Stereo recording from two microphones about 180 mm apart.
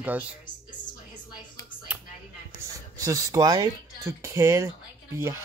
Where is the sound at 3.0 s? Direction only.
15° right (ahead or behind).